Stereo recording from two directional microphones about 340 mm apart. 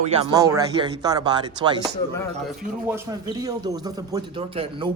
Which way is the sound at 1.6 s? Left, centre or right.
Centre.